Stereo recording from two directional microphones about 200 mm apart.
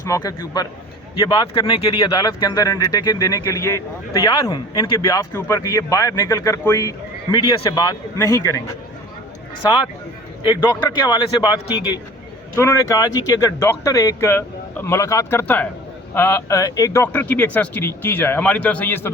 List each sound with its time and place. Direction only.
0.0 s speech: 15° left (ahead or behind)
10.4 s a man's voice: 20° left (ahead or behind)